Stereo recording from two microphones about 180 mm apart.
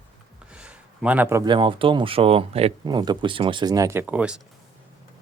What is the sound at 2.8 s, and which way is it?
Speech, 25° right (ahead or behind).